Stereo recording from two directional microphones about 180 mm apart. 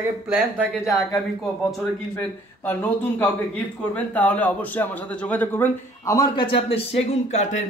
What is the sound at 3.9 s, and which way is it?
A man's voice, 10° left (ahead or behind).